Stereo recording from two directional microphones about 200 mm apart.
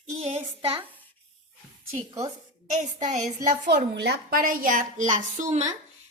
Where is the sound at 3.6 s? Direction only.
60° right (ahead or behind); by 5.8 s 35° right (ahead or behind).